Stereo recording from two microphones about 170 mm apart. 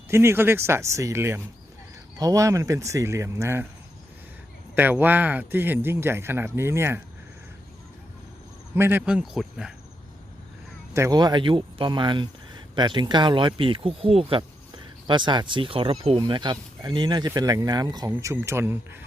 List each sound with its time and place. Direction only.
0.1 s speech: 15° right (ahead or behind)
4.7 s speech: 10° right (ahead or behind)
8.7 s speech: 10° right (ahead or behind)
10.9 s speech: 20° right (ahead or behind)